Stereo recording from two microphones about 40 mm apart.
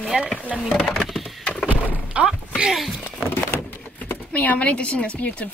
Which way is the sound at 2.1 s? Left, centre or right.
Right.